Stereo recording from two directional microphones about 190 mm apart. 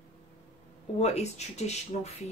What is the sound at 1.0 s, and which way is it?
Speech, 35° left (ahead or behind).